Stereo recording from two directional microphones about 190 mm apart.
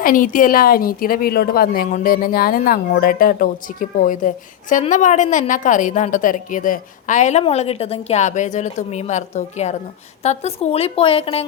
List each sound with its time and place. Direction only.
0.0 s a woman's voice: 45° left (ahead or behind); by 11.4 s 30° left (ahead or behind)